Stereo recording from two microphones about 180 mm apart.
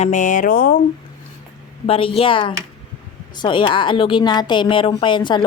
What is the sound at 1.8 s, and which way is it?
A woman's voice, 30° left (ahead or behind).